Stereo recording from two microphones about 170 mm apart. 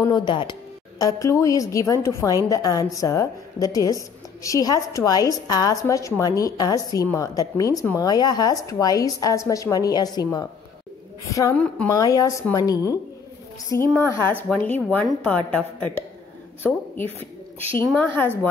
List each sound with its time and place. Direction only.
0.1 s a woman's voice: 25° left (ahead or behind); by 16.8 s 5° left (ahead or behind)
17.8 s a woman's voice: 10° left (ahead or behind)